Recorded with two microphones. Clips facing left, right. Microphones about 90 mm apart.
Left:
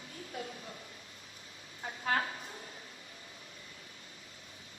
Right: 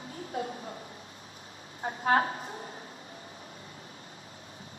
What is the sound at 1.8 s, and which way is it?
Speech, 40° right (ahead or behind).